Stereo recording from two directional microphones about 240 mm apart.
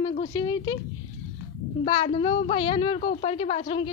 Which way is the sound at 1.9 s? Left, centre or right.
Left.